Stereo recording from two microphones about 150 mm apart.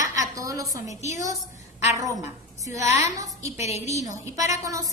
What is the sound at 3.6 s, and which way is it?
Speech, 45° left (ahead or behind).